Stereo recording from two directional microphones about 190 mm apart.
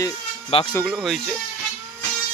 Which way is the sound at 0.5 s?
30° left (ahead or behind).